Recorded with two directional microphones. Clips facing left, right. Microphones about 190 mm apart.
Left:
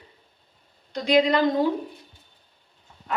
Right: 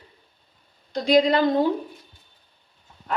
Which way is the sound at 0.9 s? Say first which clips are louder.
Right 2 dB; 30° right (ahead or behind).